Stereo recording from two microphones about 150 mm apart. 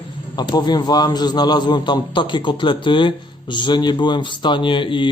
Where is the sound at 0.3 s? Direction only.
30° left (ahead or behind).